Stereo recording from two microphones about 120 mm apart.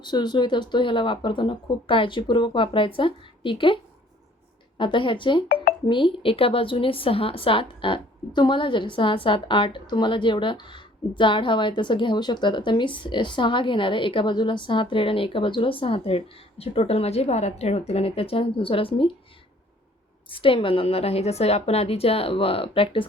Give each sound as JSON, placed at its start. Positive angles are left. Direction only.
{"t": 0.0, "sound": "a woman's voice", "side_deg": 35}
{"t": 4.8, "sound": "a woman's voice", "side_deg": 45}
{"t": 20.3, "sound": "a woman's voice", "side_deg": 45}